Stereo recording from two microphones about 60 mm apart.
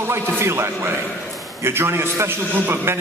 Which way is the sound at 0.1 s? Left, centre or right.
Right.